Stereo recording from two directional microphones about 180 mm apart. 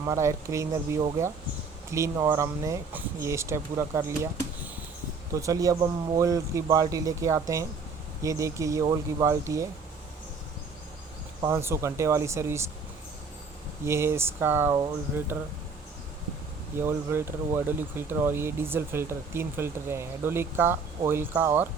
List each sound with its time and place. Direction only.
0.0 s speech: 15° right (ahead or behind)
5.3 s speech: 20° right (ahead or behind)
11.3 s speech: 15° right (ahead or behind)
13.8 s speech: 15° right (ahead or behind)
16.7 s speech: 15° right (ahead or behind)